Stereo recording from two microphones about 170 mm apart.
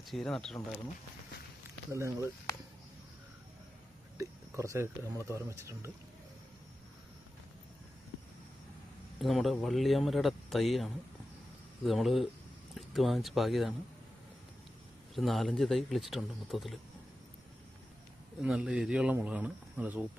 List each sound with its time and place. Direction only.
0.0 s speech: centre (ahead or behind)
1.9 s speech: 15° right (ahead or behind)
4.2 s speech: 20° right (ahead or behind)
9.2 s speech: centre (ahead or behind)
15.1 s speech: centre (ahead or behind)
18.4 s speech: 5° right (ahead or behind)